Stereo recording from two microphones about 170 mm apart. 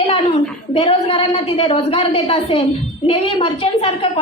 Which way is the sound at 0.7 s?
35° left (ahead or behind).